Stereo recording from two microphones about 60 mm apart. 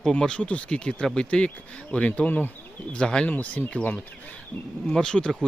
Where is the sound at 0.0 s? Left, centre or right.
Centre.